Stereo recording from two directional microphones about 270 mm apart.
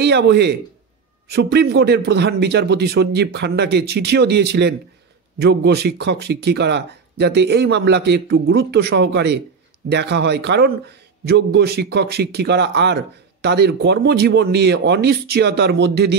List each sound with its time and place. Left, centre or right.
0.0 s a man's voice: right